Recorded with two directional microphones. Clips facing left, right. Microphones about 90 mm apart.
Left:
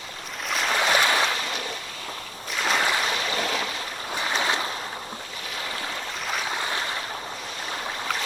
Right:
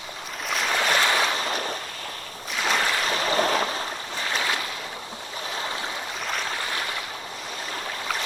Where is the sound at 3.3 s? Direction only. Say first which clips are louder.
Right 5 dB; 40° right (ahead or behind).